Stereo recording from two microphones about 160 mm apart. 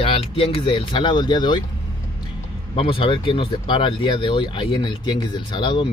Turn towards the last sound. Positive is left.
turn(degrees=30)  # may be behind; listen again after turning